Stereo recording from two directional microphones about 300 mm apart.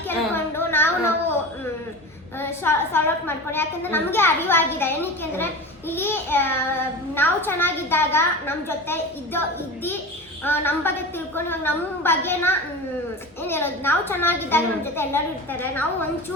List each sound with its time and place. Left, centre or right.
0.1 s a sound: centre
2.4 s a woman's voice: centre
10.4 s a woman's voice: centre